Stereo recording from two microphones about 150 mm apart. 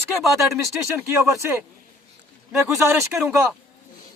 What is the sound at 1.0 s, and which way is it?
Speech, 15° right (ahead or behind).